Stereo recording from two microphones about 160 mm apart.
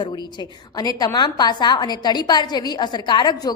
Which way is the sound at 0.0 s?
25° left (ahead or behind).